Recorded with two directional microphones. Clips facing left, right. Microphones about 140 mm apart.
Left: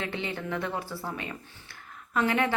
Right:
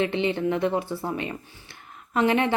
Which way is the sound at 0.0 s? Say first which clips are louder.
Right 10 dB; 20° right (ahead or behind).